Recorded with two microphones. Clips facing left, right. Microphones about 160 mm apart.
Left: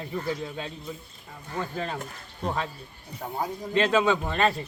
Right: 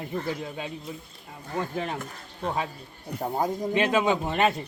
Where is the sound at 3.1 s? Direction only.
40° right (ahead or behind).